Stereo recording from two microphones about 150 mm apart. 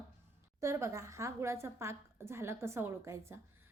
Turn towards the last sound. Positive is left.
turn(degrees=-20)  # may be behind; listen again after turning